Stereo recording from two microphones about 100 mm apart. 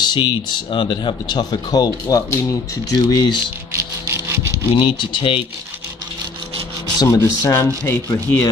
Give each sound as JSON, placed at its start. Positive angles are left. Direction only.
{"t": 0.0, "sound": "speech", "side_deg": 50}
{"t": 3.7, "sound": "a sound", "side_deg": -30}
{"t": 4.7, "sound": "speech", "side_deg": 55}
{"t": 7.0, "sound": "speech", "side_deg": 30}